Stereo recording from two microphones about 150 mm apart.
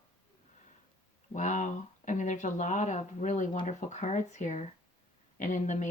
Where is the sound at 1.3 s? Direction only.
55° left (ahead or behind).